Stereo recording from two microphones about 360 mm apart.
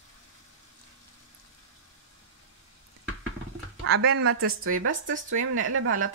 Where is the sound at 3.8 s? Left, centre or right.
Right.